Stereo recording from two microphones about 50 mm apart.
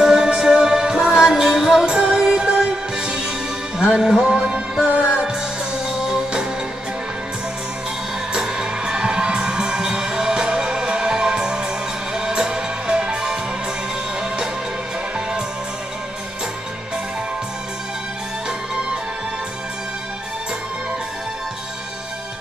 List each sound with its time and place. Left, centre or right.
0.0 s music: centre
4.4 s music: right
8.3 s music: centre